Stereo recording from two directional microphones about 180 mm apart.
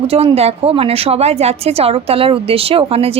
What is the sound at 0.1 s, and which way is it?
A woman's voice, 35° right (ahead or behind).